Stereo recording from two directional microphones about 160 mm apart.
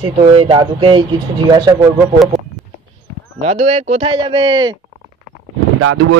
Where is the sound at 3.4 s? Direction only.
40° right (ahead or behind).